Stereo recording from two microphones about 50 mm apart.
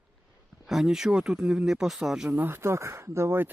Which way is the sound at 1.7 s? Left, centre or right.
Centre.